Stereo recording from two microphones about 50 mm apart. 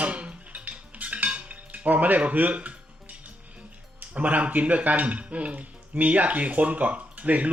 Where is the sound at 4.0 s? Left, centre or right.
Right.